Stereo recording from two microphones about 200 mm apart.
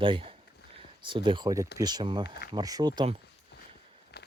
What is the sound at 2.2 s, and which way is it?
Speech, 55° left (ahead or behind).